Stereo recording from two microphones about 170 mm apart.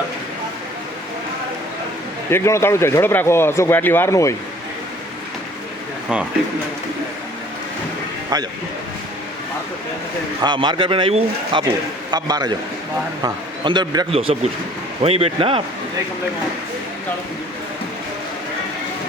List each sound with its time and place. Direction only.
2.3 s speech: 15° left (ahead or behind)
8.3 s speech: 20° right (ahead or behind)
10.4 s speech: 25° right (ahead or behind)
14.1 s a man's voice: 35° right (ahead or behind)